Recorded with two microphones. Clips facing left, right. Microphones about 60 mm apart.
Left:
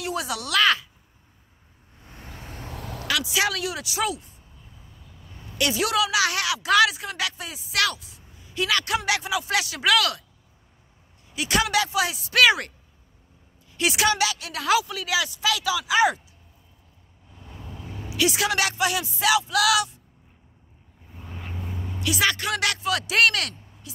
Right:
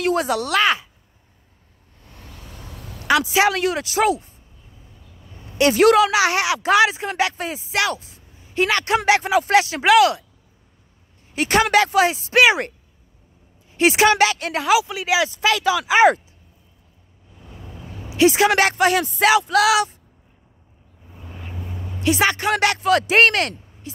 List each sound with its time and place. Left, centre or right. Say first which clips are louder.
0.0 s speech: right 9 dB; right
2.0 s vehicle: left 1 dB; left
3.1 s speech: right 8 dB; right
5.7 s speech: right 11 dB; right
6.1 s speech: right 5 dB; right
11.3 s speech: right 7 dB; right
14.9 s speech: right 6 dB; right
15.2 s speech: right 6 dB; right
18.1 s speech: right 8 dB; right
19.5 s speech: right 5 dB; right
21.6 s vehicle: even; centre
22.0 s speech: right 6 dB; right